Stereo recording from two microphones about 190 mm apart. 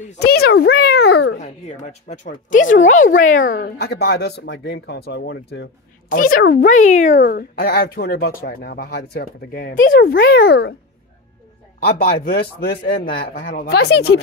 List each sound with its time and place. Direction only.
0.2 s a child's voice: 55° left (ahead or behind)
1.4 s speech: 35° left (ahead or behind); by 5.7 s 60° left (ahead or behind)
6.0 s a child's voice: 45° left (ahead or behind)
11.8 s a child's voice: 55° left (ahead or behind)